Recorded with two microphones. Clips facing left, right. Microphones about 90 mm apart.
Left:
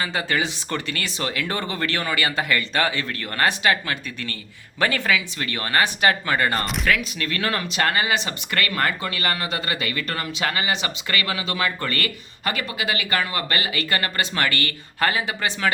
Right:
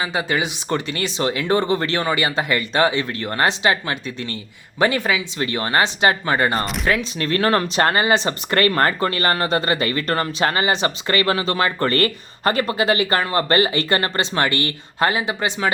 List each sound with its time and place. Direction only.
0.0 s speech: 15° right (ahead or behind)